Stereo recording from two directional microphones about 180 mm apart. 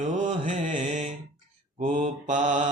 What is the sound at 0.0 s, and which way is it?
Mantra, 40° right (ahead or behind).